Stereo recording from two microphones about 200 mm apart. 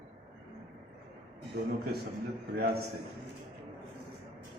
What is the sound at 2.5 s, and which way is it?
Speech, 50° right (ahead or behind).